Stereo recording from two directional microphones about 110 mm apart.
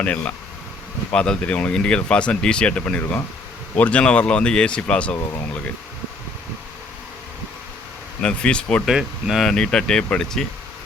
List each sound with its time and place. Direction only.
1.1 s speech: 10° left (ahead or behind)
8.2 s speech: 10° left (ahead or behind)
8.9 s speech: 5° right (ahead or behind)